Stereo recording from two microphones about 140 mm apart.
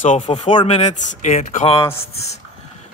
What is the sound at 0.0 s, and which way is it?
Speech, 65° left (ahead or behind).